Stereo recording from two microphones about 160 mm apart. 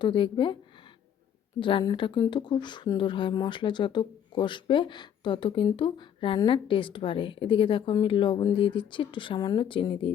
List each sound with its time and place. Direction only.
0.0 s a woman's voice: 30° left (ahead or behind)
1.5 s a woman's voice: 30° left (ahead or behind)